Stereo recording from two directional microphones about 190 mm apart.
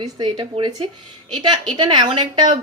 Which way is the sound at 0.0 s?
25° right (ahead or behind).